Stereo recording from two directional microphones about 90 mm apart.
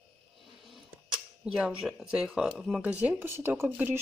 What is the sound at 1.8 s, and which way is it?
Speech, 10° right (ahead or behind).